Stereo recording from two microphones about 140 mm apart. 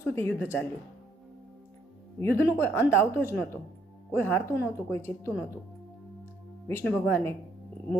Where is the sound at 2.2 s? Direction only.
15° left (ahead or behind).